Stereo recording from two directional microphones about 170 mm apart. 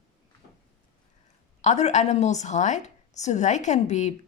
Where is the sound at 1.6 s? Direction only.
40° left (ahead or behind).